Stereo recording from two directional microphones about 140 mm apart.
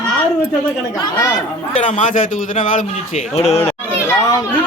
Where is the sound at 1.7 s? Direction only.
60° left (ahead or behind).